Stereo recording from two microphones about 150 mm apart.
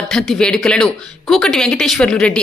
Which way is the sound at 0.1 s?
5° left (ahead or behind).